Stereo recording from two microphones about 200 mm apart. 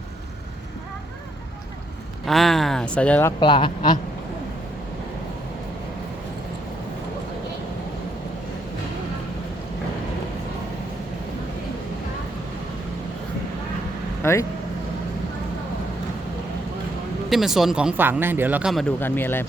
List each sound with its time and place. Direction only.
2.2 s speech: centre (ahead or behind)
3.4 s speech: 25° left (ahead or behind)
14.2 s vehicle: 15° left (ahead or behind)
17.2 s speech: centre (ahead or behind)